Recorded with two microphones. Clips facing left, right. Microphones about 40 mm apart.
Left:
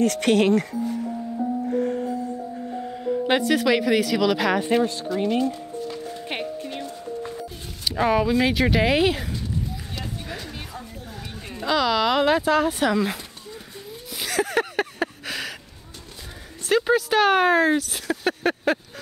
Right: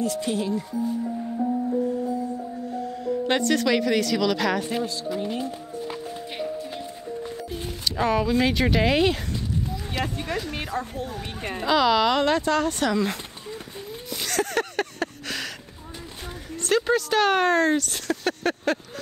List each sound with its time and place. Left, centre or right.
0.0 s speech: left
3.3 s speech: centre
5.1 s speech: centre
6.2 s speech: left
7.8 s speech: centre
10.7 s speech: right
11.6 s speech: centre
14.1 s a sound: centre
16.5 s speech: centre